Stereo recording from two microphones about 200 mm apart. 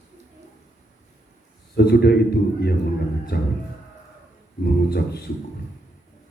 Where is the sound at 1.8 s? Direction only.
55° left (ahead or behind).